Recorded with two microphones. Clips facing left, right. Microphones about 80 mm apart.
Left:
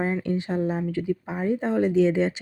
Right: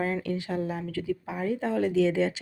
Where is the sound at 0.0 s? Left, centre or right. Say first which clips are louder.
Left 3 dB; left.